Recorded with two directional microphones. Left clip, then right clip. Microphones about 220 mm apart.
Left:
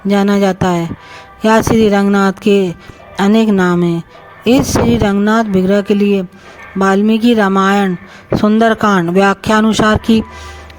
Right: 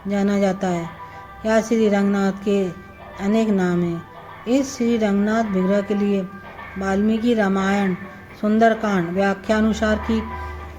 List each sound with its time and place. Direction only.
0.1 s speech: 50° left (ahead or behind)